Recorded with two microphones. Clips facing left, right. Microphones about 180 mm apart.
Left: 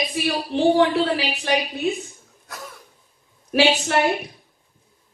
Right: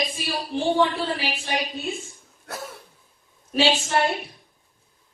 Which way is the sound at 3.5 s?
65° left (ahead or behind).